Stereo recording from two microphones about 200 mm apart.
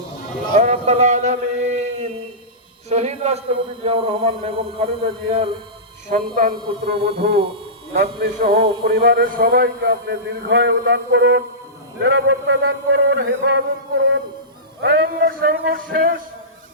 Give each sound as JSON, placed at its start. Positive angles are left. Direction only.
{"t": 0.5, "sound": "a man's voice", "side_deg": -35}
{"t": 6.1, "sound": "a man's voice", "side_deg": -45}
{"t": 6.5, "sound": "a man's voice", "side_deg": -25}
{"t": 7.0, "sound": "a man's voice", "side_deg": -50}
{"t": 8.5, "sound": "a man's voice", "side_deg": -30}
{"t": 8.8, "sound": "a man's voice", "side_deg": -50}
{"t": 14.8, "sound": "a man's voice", "side_deg": -50}